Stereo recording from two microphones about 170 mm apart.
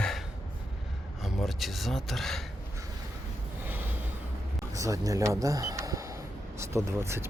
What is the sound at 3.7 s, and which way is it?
Snort, 10° right (ahead or behind).